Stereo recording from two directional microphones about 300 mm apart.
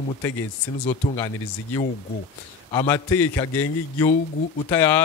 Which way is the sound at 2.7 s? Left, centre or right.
Centre.